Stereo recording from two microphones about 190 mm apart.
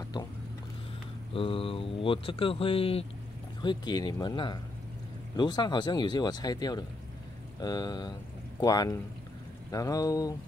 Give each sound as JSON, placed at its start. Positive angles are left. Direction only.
{"t": 1.3, "sound": "speech", "side_deg": 30}